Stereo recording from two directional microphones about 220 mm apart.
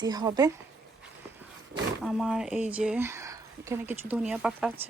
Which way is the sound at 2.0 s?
Centre (ahead or behind).